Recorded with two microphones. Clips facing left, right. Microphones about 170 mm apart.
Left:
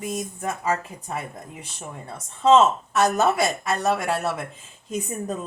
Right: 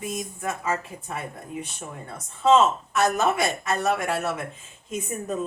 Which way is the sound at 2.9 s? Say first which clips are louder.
Left 2 dB; 35° left (ahead or behind).